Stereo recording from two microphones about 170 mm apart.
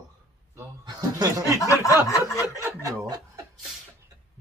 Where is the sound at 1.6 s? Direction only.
20° left (ahead or behind).